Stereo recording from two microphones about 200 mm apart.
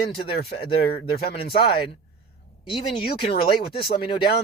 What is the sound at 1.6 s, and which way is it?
Speech, 25° left (ahead or behind).